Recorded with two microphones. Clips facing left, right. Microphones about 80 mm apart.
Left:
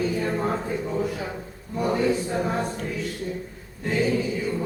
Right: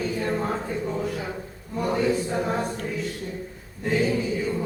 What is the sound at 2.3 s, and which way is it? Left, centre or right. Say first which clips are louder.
Choir: even; centre.